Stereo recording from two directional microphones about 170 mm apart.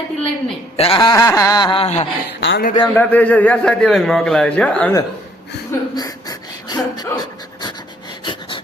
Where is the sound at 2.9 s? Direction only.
10° left (ahead or behind).